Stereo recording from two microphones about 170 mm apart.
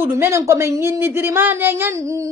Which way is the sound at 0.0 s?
15° right (ahead or behind).